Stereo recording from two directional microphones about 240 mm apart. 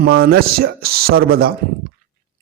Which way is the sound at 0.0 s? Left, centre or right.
Right.